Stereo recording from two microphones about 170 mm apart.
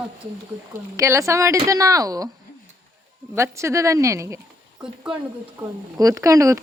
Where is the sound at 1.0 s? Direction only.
15° right (ahead or behind).